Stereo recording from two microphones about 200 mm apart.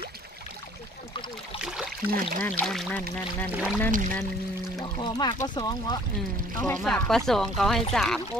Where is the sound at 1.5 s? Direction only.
5° right (ahead or behind).